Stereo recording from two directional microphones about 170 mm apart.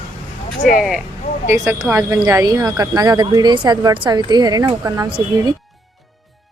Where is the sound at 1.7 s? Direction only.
15° right (ahead or behind).